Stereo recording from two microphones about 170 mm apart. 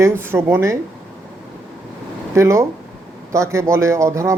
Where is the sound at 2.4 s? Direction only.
15° right (ahead or behind).